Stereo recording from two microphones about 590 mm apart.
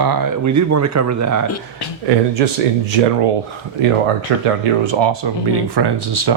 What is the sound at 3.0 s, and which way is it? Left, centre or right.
Speech, right.